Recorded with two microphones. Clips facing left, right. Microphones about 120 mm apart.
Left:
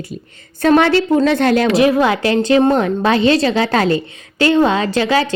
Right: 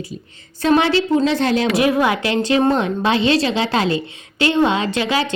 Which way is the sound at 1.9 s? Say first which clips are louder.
Left 3 dB; 30° left (ahead or behind).